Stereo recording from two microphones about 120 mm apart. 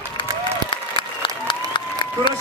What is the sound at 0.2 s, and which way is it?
Applause, 40° left (ahead or behind).